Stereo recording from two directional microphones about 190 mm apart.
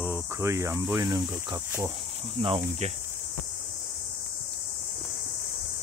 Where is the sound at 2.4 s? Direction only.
35° right (ahead or behind).